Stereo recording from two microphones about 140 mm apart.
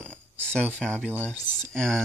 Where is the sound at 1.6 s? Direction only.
5° left (ahead or behind).